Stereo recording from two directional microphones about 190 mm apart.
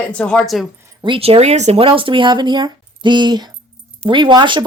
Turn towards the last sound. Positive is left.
turn(degrees=-25)  # may be behind; listen again after turning